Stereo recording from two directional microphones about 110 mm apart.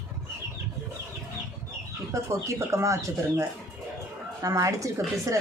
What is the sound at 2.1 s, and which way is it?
Speech, 25° right (ahead or behind).